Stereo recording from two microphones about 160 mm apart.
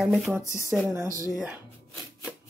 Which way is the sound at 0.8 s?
15° right (ahead or behind).